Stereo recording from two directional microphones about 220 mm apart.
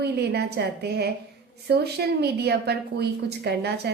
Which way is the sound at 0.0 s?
45° right (ahead or behind).